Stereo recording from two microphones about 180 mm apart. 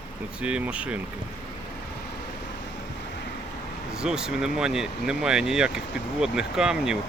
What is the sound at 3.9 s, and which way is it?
Speech, 5° right (ahead or behind).